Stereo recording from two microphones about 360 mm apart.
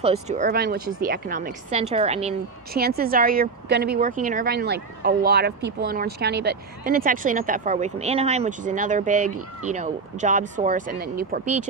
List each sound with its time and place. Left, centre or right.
0.0 s a woman's voice: centre